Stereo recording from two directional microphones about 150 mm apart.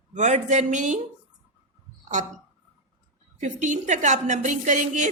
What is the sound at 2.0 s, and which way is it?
Speech, 55° right (ahead or behind).